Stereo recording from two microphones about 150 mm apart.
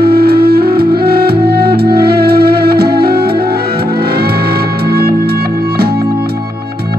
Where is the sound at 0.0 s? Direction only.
90° right.